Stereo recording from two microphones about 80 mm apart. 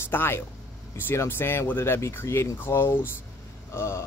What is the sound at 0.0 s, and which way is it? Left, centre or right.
Speech, left.